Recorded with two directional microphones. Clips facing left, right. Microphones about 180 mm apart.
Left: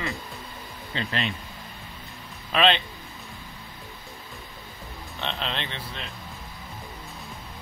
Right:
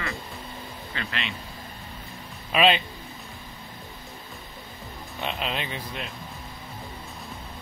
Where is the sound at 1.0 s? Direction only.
35° left (ahead or behind).